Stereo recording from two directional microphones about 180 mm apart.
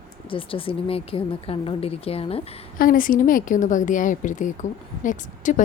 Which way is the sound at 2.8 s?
50° left (ahead or behind).